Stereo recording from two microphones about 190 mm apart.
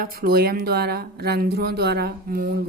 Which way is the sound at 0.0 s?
50° right (ahead or behind).